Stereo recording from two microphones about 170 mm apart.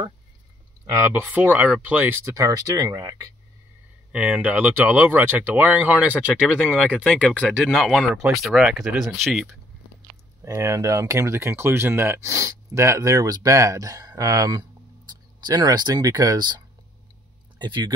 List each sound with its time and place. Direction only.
0.9 s speech: 15° right (ahead or behind)
4.1 s speech: 10° right (ahead or behind)
10.4 s speech: 20° right (ahead or behind)